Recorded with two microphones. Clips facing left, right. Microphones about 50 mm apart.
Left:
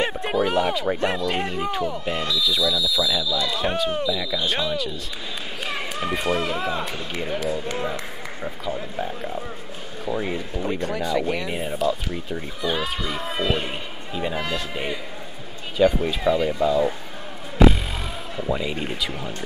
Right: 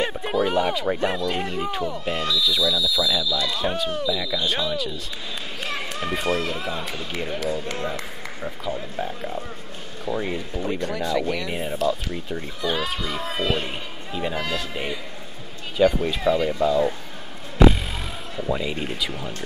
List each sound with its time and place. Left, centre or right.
0.0 s a sound: centre
0.4 s speech: centre
8.4 s speech: centre
11.2 s speech: centre
11.5 s speech: centre
15.8 s speech: centre
17.6 s music: centre
18.3 s speech: centre